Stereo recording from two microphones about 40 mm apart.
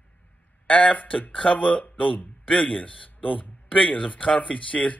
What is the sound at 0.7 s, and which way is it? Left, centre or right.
A man's voice, left.